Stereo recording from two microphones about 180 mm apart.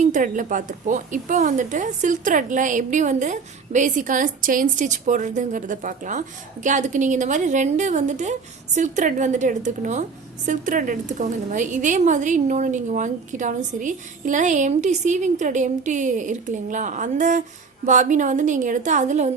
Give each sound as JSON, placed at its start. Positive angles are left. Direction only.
{"t": 0.0, "sound": "speech", "side_deg": -45}